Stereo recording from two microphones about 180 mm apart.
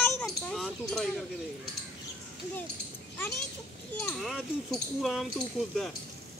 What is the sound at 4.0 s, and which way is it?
A child's voice, centre (ahead or behind).